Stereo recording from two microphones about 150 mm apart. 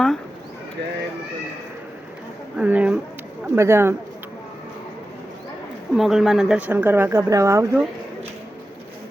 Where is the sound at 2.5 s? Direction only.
10° right (ahead or behind).